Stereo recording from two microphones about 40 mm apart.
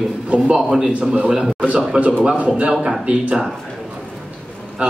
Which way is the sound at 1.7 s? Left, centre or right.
Right.